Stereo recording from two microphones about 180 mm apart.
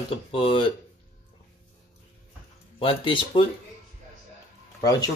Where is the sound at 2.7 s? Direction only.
30° left (ahead or behind).